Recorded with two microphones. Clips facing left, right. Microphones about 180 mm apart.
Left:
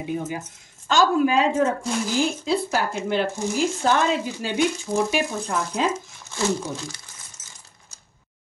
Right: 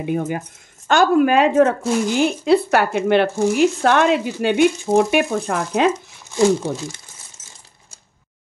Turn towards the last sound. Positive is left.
turn(degrees=-25)  # may be behind; listen again after turning